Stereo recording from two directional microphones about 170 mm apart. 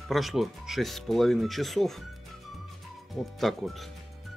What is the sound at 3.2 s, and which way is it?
Speech, centre (ahead or behind).